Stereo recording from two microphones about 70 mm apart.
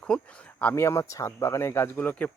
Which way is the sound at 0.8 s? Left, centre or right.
Left.